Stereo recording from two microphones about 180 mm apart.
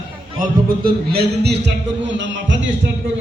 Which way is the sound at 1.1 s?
70° right (ahead or behind).